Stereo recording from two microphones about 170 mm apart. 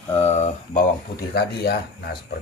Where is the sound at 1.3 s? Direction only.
70° left (ahead or behind).